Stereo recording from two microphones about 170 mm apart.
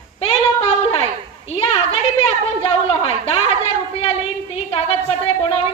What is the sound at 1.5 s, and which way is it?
A woman's voice, 35° left (ahead or behind).